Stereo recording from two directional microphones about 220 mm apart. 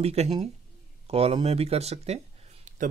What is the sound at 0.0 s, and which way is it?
A man's voice, 30° right (ahead or behind).